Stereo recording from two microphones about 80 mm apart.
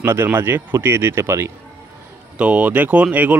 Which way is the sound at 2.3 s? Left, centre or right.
Centre.